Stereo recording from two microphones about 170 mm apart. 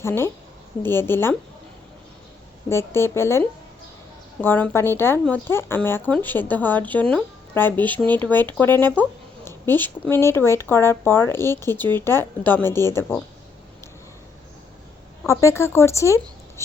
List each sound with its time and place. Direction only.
0.0 s speech: 15° left (ahead or behind)
2.6 s speech: 15° left (ahead or behind)
15.3 s a woman's voice: 15° left (ahead or behind)